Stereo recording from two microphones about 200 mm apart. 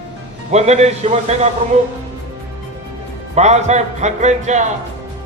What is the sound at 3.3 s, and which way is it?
A man's voice, 35° right (ahead or behind).